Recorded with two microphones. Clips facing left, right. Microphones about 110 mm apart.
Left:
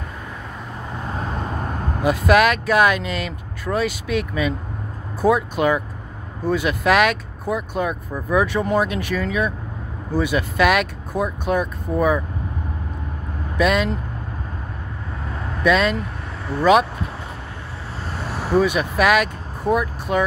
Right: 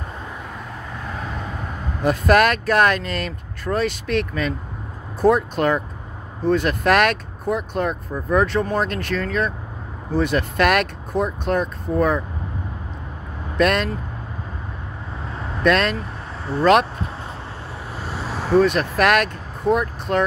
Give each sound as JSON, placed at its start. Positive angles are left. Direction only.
{"t": 1.2, "sound": "vehicle", "side_deg": 40}
{"t": 2.0, "sound": "speech", "side_deg": 5}
{"t": 13.6, "sound": "speech", "side_deg": 5}
{"t": 15.6, "sound": "speech", "side_deg": 5}
{"t": 18.5, "sound": "speech", "side_deg": 10}